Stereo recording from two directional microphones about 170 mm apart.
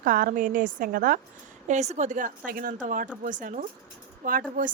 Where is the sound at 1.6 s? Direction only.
40° right (ahead or behind).